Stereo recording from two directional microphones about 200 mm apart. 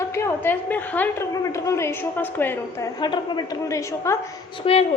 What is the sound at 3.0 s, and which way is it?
A woman's voice, 20° left (ahead or behind).